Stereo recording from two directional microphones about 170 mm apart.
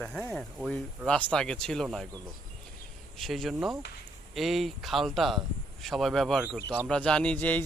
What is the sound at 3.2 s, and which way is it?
A man's voice, centre (ahead or behind).